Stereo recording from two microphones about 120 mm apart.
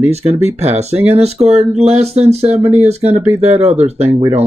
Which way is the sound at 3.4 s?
65° right (ahead or behind).